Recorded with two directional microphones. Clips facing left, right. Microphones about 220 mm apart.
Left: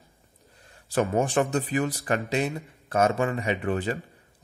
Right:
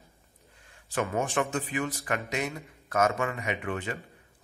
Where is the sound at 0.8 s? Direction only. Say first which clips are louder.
Left 5 dB; 35° left (ahead or behind).